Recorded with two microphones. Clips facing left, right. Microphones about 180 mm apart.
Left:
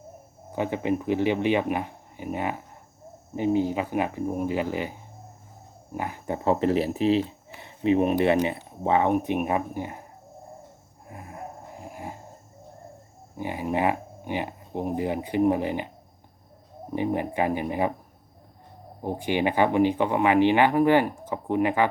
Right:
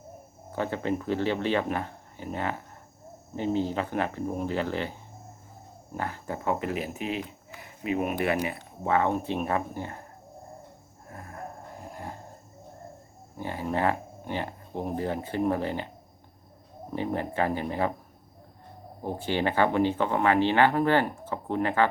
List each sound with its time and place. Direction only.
0.5 s speech: 15° left (ahead or behind)
6.0 s speech: 15° left (ahead or behind)
11.1 s a sound: 15° left (ahead or behind)
13.3 s speech: 15° left (ahead or behind)
16.9 s speech: 15° left (ahead or behind)
19.0 s speech: 15° left (ahead or behind)